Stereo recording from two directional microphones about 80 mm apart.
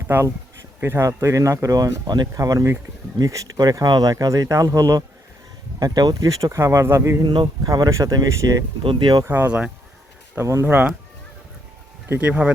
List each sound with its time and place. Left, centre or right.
0.1 s speech: right
7.2 s speech: right
7.4 s speech: right
7.9 s speech: right
8.8 s speech: right
9.2 s speech: right
12.2 s speech: centre